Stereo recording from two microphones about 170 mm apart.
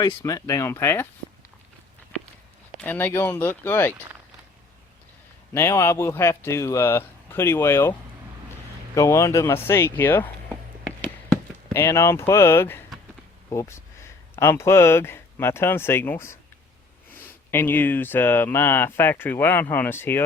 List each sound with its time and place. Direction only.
0.2 s speech: 20° left (ahead or behind)
2.8 s speech: 10° left (ahead or behind)
5.5 s speech: 15° left (ahead or behind)
9.0 s speech: 20° left (ahead or behind)
11.0 s a sound: 15° left (ahead or behind)
13.5 s speech: 15° left (ahead or behind)